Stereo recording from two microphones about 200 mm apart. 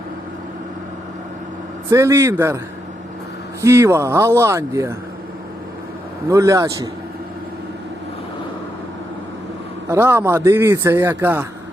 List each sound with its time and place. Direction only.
1.9 s a man's voice: 15° right (ahead or behind)
3.6 s a man's voice: 15° right (ahead or behind)
6.3 s a man's voice: 15° right (ahead or behind)
9.9 s a man's voice: 10° right (ahead or behind)